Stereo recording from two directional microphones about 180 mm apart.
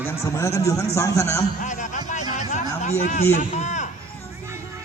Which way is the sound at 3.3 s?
40° left (ahead or behind).